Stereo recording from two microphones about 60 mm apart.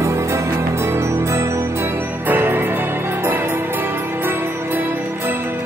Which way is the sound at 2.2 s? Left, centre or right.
Right.